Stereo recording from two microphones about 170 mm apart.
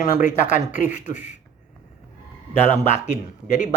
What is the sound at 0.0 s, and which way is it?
Speech, 45° left (ahead or behind).